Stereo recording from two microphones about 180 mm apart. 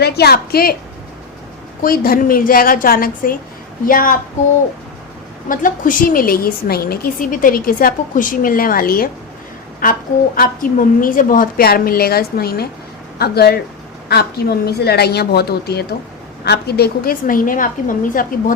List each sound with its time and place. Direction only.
0.0 s a woman's voice: 60° left (ahead or behind)
1.8 s a woman's voice: 55° left (ahead or behind)
5.5 s a woman's voice: 50° left (ahead or behind)